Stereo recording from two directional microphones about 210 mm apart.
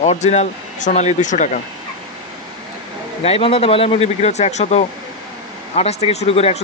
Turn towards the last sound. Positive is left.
turn(degrees=30)  # may be behind; listen again after turning